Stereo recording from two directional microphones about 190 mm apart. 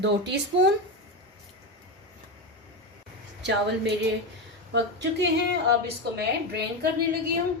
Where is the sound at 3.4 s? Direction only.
65° right (ahead or behind).